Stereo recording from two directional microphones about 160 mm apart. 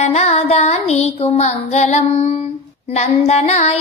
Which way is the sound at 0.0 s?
45° left (ahead or behind).